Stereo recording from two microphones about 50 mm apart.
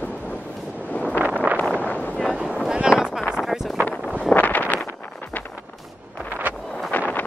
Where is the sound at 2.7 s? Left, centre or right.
Centre.